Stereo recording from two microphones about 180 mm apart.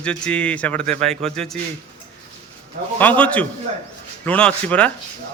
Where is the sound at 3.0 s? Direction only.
10° left (ahead or behind).